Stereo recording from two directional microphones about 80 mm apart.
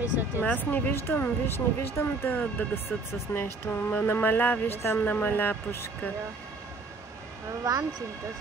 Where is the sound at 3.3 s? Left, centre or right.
Left.